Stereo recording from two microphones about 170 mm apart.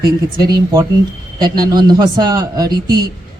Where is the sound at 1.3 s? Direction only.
25° right (ahead or behind).